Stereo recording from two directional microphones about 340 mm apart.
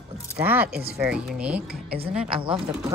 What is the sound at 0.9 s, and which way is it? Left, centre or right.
Speech, centre.